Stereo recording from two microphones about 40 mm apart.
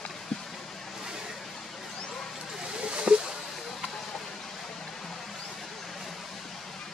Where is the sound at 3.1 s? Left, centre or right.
Right.